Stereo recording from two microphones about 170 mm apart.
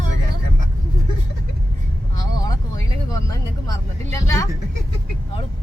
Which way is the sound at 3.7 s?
20° left (ahead or behind).